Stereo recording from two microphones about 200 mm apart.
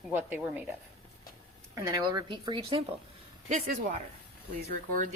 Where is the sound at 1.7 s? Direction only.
20° right (ahead or behind).